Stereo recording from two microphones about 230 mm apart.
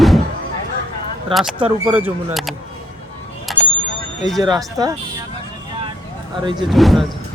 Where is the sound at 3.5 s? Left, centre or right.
Centre.